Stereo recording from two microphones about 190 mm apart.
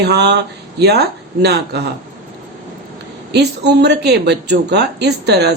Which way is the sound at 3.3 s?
60° right (ahead or behind).